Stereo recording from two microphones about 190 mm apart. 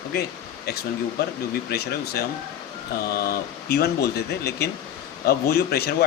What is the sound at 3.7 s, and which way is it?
Speech, 60° left (ahead or behind).